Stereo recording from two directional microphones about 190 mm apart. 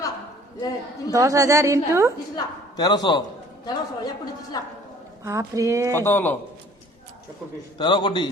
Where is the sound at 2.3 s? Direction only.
20° left (ahead or behind).